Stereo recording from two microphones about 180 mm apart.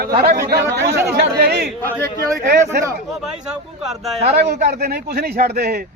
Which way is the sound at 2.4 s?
65° right (ahead or behind).